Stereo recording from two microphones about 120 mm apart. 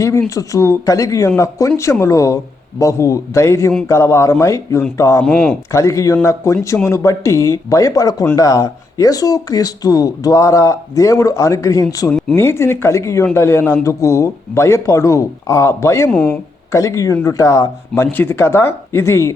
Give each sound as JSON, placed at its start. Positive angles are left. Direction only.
{"t": 0.0, "sound": "speech", "side_deg": 25}
{"t": 5.2, "sound": "speech", "side_deg": 5}
{"t": 5.7, "sound": "speech", "side_deg": 25}
{"t": 16.0, "sound": "speech", "side_deg": 5}
{"t": 16.7, "sound": "speech", "side_deg": 25}